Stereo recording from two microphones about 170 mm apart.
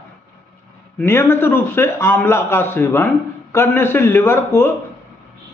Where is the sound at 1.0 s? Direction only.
15° left (ahead or behind).